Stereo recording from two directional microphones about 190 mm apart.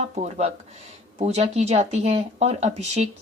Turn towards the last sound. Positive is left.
turn(degrees=-35)  # may be behind; listen again after turning